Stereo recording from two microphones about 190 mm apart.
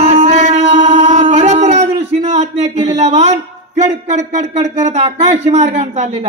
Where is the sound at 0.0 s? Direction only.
35° right (ahead or behind).